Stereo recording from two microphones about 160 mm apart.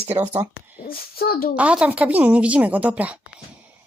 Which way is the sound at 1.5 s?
10° right (ahead or behind).